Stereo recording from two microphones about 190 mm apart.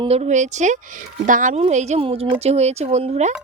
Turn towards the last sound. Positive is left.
turn(degrees=-35)  # may be behind; listen again after turning